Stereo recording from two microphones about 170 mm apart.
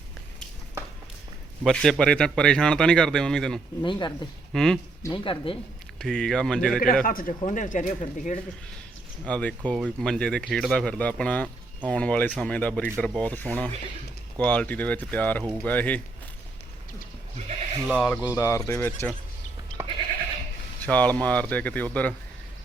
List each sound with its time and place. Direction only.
1.6 s speech: centre (ahead or behind)
3.8 s speech: 30° left (ahead or behind)
4.5 s speech: 5° left (ahead or behind)
5.0 s speech: 30° left (ahead or behind)
6.0 s speech: 5° left (ahead or behind)
7.0 s speech: 55° left (ahead or behind)
9.2 s speech: 5° left (ahead or behind)
17.8 s speech: 5° left (ahead or behind)
18.3 s speech: 20° left (ahead or behind)
20.8 s speech: 10° left (ahead or behind)